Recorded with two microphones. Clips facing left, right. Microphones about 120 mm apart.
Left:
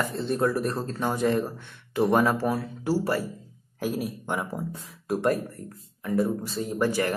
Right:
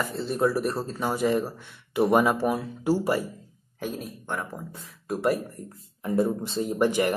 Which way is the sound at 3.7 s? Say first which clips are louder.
Left 4 dB; 5° left (ahead or behind).